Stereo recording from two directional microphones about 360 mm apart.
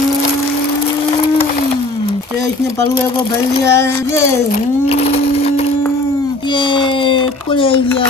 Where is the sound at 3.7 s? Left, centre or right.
Centre.